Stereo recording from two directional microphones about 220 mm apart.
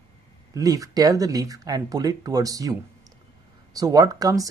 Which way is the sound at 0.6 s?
15° right (ahead or behind).